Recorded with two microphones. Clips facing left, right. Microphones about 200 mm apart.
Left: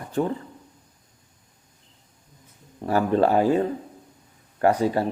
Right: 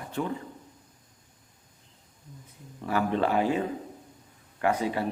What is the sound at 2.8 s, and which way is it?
Speech, 40° left (ahead or behind).